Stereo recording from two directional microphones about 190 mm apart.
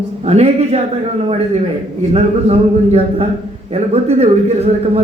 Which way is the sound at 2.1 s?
30° right (ahead or behind).